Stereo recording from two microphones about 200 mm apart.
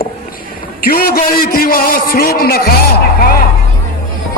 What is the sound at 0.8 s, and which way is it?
A man's voice, 45° left (ahead or behind).